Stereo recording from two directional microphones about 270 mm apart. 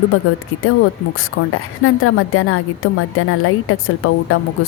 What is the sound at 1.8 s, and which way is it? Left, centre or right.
Speech, left.